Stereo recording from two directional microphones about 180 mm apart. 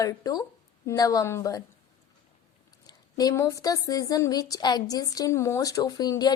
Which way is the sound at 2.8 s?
20° left (ahead or behind).